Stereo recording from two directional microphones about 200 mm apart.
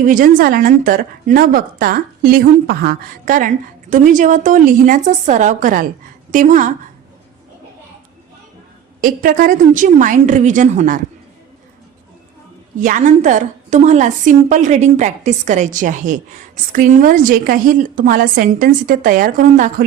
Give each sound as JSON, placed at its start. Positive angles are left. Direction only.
{"t": 0.0, "sound": "a woman's voice", "side_deg": -40}
{"t": 9.0, "sound": "a woman's voice", "side_deg": -45}
{"t": 12.8, "sound": "a woman's voice", "side_deg": -40}